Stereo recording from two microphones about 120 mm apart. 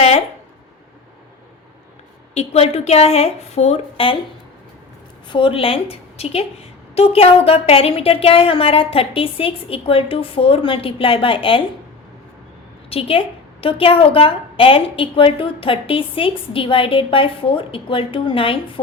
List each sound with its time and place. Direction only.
2.3 s a woman's voice: 60° left (ahead or behind)
5.3 s a woman's voice: 45° left (ahead or behind)
12.9 s a woman's voice: 50° left (ahead or behind)